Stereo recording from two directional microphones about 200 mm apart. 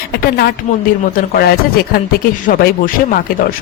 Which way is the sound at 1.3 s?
50° left (ahead or behind).